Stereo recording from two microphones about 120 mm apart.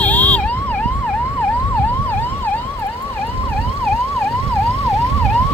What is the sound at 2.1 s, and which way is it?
Emergency vehicle, 15° left (ahead or behind).